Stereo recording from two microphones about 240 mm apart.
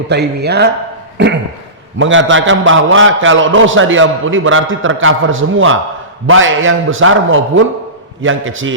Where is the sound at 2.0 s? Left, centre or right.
Right.